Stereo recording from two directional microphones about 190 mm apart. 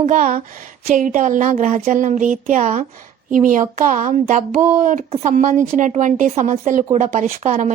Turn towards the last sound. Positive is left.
turn(degrees=-40)  # may be behind; listen again after turning